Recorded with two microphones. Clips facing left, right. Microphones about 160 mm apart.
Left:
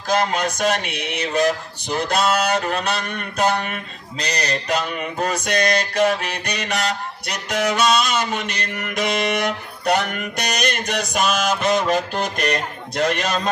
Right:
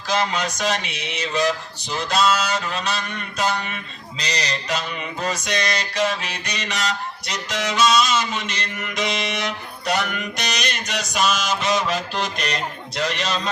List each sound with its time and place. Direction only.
0.1 s mantra: 50° left (ahead or behind)